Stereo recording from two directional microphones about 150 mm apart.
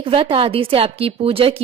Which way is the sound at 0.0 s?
35° right (ahead or behind).